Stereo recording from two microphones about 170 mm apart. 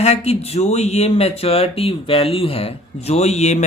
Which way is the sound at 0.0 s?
40° left (ahead or behind).